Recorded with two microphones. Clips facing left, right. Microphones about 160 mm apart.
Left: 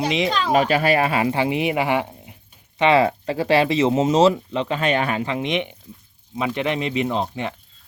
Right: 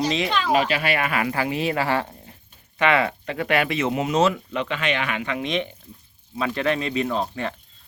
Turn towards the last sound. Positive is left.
turn(degrees=20)  # may be behind; listen again after turning